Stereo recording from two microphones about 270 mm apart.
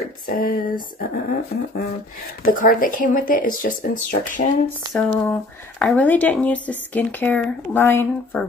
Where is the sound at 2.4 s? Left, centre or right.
Left.